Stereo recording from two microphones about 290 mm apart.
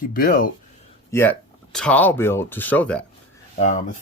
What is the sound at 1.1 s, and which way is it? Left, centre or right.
Speech, centre.